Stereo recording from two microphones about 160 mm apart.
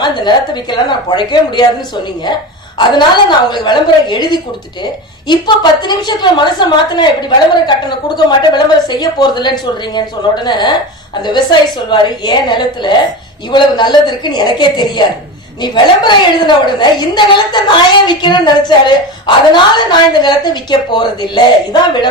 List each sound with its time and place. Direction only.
0.0 s a woman's voice: 30° left (ahead or behind)
2.7 s a woman's voice: 25° left (ahead or behind)